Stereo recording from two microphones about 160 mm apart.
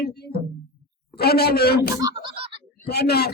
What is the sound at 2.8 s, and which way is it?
Speech, 90° left.